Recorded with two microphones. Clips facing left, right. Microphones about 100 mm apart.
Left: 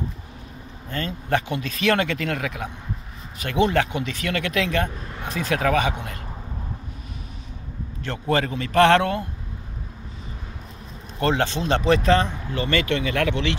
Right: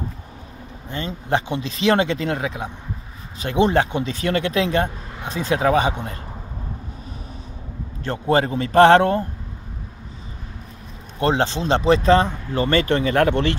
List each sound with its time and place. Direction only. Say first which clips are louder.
0.8 s speech: right 1 dB; 20° right (ahead or behind)
8.0 s speech: right 4 dB; 35° right (ahead or behind)
11.1 s speech: right 2 dB; 30° right (ahead or behind); by 13.6 s 45° right (ahead or behind)